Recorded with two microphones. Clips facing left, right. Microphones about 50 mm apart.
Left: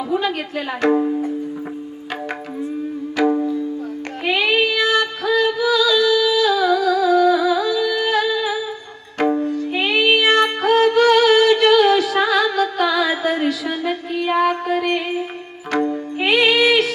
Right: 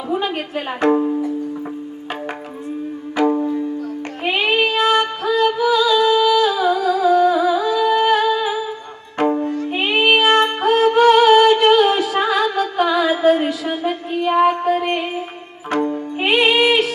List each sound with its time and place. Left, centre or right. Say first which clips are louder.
0.1 s a woman's voice: right 2 dB; right
3.2 s music: even; right
4.3 s child singing: even; right
5.4 s humming: right 2 dB; right
9.1 s music: even; right